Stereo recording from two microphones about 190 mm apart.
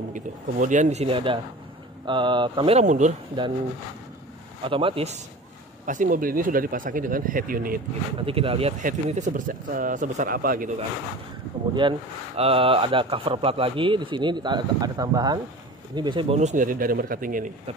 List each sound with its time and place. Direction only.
0.1 s a man's voice: 40° right (ahead or behind)
3.4 s speech: 25° right (ahead or behind)
4.6 s speech: 30° right (ahead or behind)
5.9 s speech: 45° right (ahead or behind)
8.2 s speech: 30° right (ahead or behind)
8.8 s speech: 40° right (ahead or behind)
11.8 s speech: 25° right (ahead or behind)
16.3 s speech: 40° right (ahead or behind)